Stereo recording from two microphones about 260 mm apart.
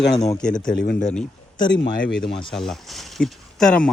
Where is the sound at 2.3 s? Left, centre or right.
Centre.